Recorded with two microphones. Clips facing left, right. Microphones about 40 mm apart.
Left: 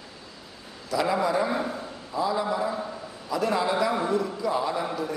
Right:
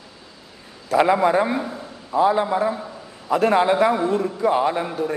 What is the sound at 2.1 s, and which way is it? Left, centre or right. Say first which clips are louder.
A man's voice: right 8 dB; right.